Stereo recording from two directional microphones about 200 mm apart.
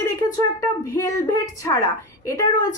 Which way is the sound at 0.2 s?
20° left (ahead or behind).